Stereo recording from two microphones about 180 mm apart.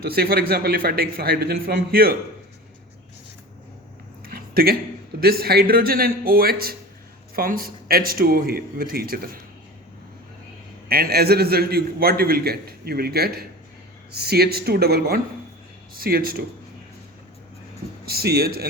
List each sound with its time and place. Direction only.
0.1 s a man's voice: 55° right (ahead or behind)
4.2 s a sound: 55° right (ahead or behind)
5.2 s a man's voice: 60° right (ahead or behind)
10.8 s a man's voice: 55° right (ahead or behind)
18.0 s a man's voice: 60° right (ahead or behind)